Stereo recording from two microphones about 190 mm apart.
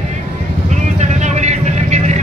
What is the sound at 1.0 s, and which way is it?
Vehicle, 35° right (ahead or behind).